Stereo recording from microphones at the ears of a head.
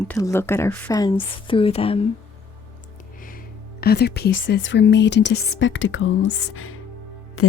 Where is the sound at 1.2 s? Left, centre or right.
Left.